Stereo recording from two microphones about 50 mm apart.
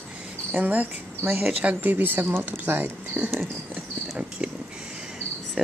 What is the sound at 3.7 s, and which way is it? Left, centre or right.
Speech, centre.